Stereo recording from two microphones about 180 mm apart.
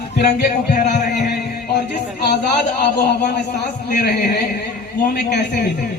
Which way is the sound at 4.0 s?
60° left (ahead or behind).